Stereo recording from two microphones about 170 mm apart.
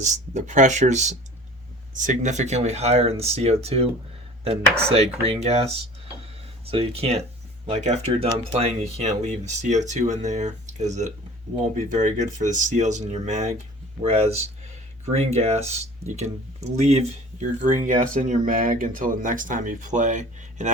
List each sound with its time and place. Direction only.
0.0 s speech: 45° right (ahead or behind)
4.9 s speech: 35° right (ahead or behind)
6.7 s speech: 35° right (ahead or behind)